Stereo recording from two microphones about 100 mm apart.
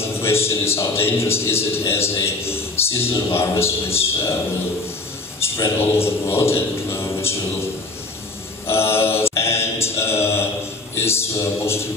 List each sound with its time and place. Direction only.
0.0 s a man's voice: 25° left (ahead or behind)
5.4 s a man's voice: 25° left (ahead or behind)
8.6 s mantra: 25° left (ahead or behind)
11.0 s a man's voice: 25° left (ahead or behind)